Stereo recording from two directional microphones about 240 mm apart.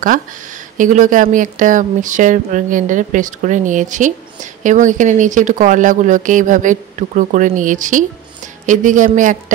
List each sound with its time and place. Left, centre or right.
0.7 s speech: right